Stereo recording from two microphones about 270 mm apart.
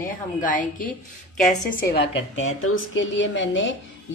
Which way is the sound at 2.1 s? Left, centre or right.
Left.